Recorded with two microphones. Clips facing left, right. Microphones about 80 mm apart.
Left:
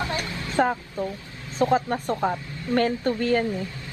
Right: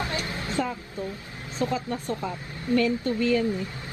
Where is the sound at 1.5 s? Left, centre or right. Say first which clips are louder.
Left 6 dB; left.